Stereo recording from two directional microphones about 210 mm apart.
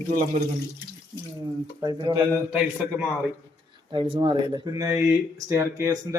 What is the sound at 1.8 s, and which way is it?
Speech, 20° right (ahead or behind).